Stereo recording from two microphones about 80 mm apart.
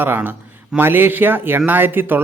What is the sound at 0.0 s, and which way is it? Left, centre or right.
Speech, right.